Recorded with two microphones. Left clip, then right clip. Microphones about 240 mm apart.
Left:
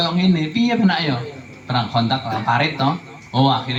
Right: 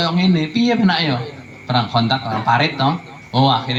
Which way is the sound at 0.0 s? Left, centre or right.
Right.